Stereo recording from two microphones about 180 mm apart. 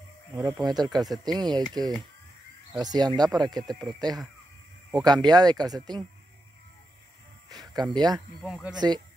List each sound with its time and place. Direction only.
0.4 s speech: centre (ahead or behind)
0.7 s speech: 20° right (ahead or behind)
7.4 s speech: 20° right (ahead or behind)
8.4 s speech: 5° right (ahead or behind)
8.7 s speech: 25° right (ahead or behind)